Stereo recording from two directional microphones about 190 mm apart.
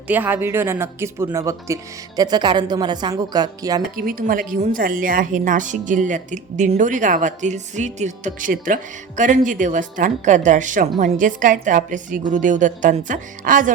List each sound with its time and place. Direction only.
0.1 s speech: 10° right (ahead or behind)
3.9 s a woman's voice: 50° right (ahead or behind)